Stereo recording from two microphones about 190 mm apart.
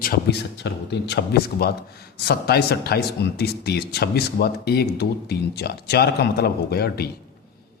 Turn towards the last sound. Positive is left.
turn(degrees=55)  # may be behind; listen again after turning